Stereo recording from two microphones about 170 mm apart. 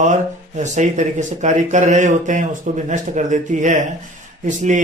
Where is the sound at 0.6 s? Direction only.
45° right (ahead or behind).